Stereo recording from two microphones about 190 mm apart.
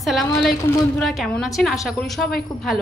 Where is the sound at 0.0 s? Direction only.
Centre (ahead or behind).